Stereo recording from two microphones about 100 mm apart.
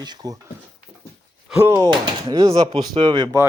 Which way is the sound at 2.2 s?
35° right (ahead or behind).